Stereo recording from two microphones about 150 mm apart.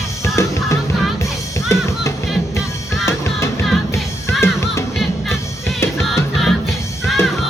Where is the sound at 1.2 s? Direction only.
20° left (ahead or behind).